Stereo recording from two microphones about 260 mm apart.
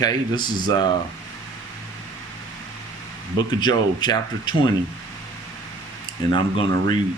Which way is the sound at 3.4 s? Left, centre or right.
Centre.